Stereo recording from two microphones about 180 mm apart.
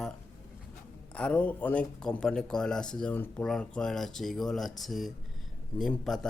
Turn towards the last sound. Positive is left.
turn(degrees=0)  # may be behind; listen again after turning